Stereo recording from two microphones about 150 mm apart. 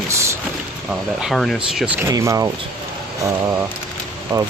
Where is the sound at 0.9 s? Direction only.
Centre (ahead or behind).